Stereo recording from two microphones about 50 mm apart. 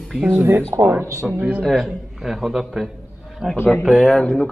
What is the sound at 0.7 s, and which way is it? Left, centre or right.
Speech, right.